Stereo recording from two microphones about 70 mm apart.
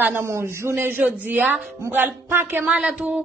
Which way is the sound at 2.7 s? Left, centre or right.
Centre.